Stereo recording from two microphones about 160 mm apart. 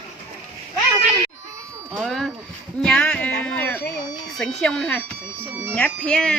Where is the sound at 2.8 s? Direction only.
5° left (ahead or behind).